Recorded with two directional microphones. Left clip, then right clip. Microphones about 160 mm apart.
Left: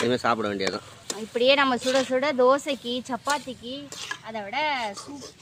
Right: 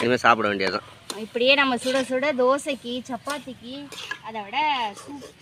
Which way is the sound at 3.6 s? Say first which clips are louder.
Even; 25° left (ahead or behind).